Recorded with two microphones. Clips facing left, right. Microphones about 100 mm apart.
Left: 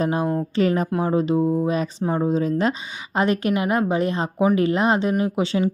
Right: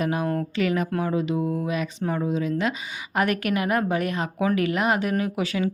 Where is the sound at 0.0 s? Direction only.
30° left (ahead or behind).